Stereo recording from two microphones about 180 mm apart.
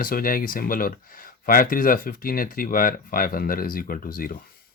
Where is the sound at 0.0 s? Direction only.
55° left (ahead or behind).